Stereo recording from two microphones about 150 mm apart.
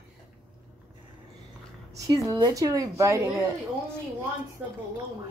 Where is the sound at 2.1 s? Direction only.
30° right (ahead or behind).